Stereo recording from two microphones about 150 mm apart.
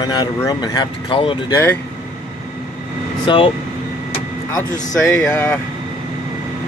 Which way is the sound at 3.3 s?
35° left (ahead or behind).